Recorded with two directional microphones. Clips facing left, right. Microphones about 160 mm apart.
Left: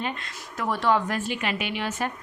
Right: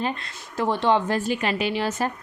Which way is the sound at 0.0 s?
35° right (ahead or behind).